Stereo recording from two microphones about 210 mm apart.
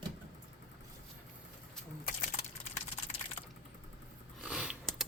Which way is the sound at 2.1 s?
45° left (ahead or behind).